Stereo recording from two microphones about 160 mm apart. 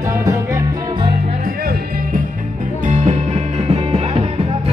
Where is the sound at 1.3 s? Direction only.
60° right (ahead or behind).